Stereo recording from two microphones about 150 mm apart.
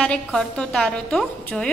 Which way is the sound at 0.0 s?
5° left (ahead or behind).